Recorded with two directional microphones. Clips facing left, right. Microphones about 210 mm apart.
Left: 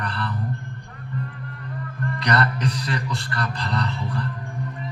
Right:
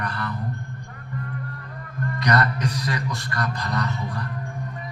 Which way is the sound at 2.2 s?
30° left (ahead or behind).